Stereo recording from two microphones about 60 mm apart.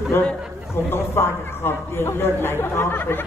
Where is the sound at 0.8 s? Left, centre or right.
Left.